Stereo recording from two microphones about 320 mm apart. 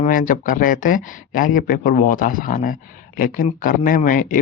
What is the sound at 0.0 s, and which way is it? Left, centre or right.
Speech, left.